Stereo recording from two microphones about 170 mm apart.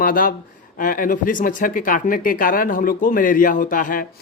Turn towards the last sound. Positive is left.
turn(degrees=55)  # may be behind; listen again after turning